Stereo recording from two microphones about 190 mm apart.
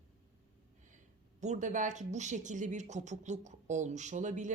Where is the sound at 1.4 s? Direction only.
40° right (ahead or behind).